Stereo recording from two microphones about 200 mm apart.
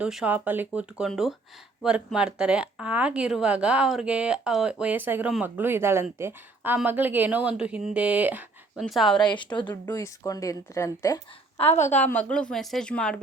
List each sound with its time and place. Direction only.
0.0 s a woman's voice: 5° right (ahead or behind)
9.2 s speech: 25° left (ahead or behind)
11.5 s a woman's voice: 30° left (ahead or behind)
11.9 s a woman's voice: 10° left (ahead or behind)